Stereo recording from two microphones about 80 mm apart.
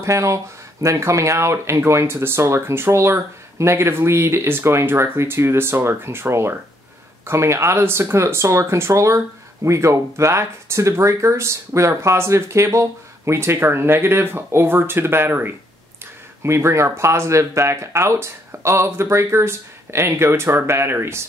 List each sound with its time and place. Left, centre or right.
0.0 s speech: right